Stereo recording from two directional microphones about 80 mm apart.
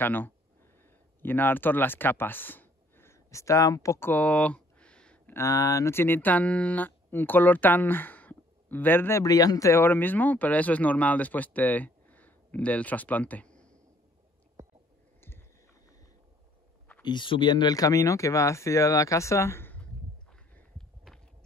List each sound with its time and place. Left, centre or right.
0.0 s speech: left
4.0 s a sound: left
5.3 s speech: left
9.2 s speech: left
9.8 s speech: left
17.0 s speech: left
20.7 s a sound: centre